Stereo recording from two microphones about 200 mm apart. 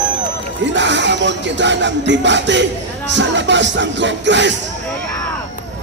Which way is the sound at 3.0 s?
65° right (ahead or behind).